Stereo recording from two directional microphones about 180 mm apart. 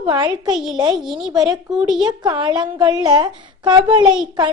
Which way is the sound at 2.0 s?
25° right (ahead or behind).